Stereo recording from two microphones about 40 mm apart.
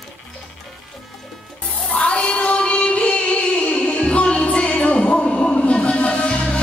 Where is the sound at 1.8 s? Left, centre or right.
Left.